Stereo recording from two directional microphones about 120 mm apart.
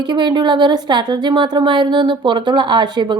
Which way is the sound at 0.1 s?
40° right (ahead or behind).